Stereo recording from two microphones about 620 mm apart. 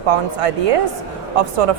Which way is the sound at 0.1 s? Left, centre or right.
Right.